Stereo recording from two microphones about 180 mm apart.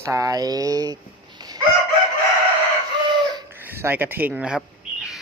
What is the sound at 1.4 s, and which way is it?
Chicken, 20° right (ahead or behind).